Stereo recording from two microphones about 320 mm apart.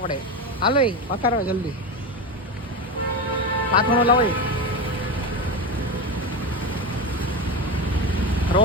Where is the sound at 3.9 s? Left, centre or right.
Centre.